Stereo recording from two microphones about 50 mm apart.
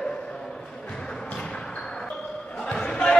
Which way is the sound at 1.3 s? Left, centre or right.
Centre.